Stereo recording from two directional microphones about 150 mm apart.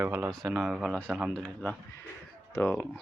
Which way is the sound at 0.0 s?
15° right (ahead or behind).